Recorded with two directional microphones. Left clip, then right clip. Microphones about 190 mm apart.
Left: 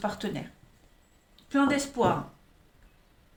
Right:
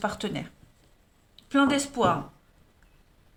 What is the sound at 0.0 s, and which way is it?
Speech, 40° right (ahead or behind).